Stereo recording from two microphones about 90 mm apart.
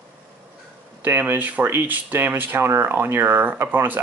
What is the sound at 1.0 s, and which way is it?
Speech, 20° right (ahead or behind).